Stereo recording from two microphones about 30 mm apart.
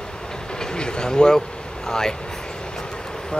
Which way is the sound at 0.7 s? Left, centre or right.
Left.